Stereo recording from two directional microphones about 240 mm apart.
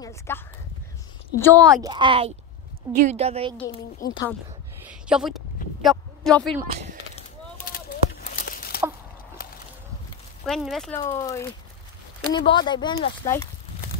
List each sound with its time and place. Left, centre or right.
0.0 s speech: centre
1.4 s speech: centre
1.8 s a woman's voice: centre
4.0 s speech: left
4.8 s a sound: centre
7.6 s chicken: left
9.4 s a sound: left
10.4 s speech: centre
11.0 s speech: centre